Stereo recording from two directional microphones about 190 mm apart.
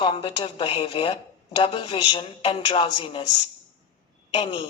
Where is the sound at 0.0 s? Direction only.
25° left (ahead or behind).